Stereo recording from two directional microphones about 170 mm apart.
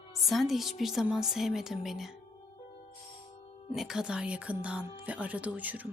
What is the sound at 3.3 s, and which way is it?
Music, 35° left (ahead or behind).